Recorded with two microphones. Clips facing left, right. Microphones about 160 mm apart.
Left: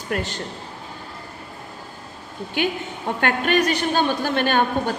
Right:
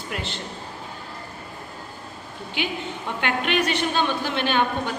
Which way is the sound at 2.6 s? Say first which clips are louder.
Left 4 dB; 45° left (ahead or behind).